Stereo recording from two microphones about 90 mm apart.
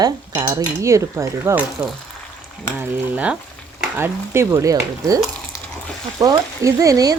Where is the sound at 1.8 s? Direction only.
20° right (ahead or behind).